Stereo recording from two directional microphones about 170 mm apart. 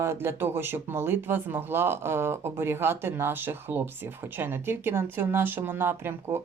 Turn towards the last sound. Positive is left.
turn(degrees=-15)  # may be behind; listen again after turning